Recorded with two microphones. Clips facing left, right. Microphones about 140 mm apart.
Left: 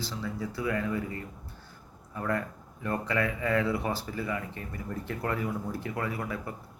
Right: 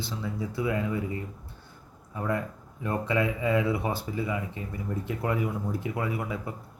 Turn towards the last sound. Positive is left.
turn(degrees=-15)  # may be behind; listen again after turning